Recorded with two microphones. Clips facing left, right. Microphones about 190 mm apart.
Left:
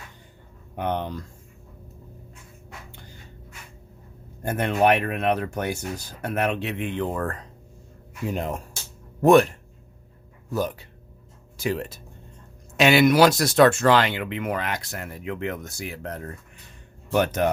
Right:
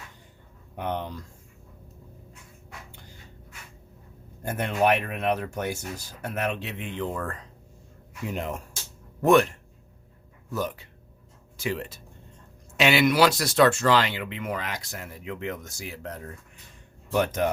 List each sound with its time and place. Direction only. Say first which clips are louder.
0.8 s speech: left 4 dB; 65° left (ahead or behind)
4.4 s speech: left 3 dB; 60° left (ahead or behind)
8.3 s speech: left 3 dB; 35° left (ahead or behind)
10.5 s speech: left 4 dB; 35° left (ahead or behind); by 17.5 s 65° left (ahead or behind)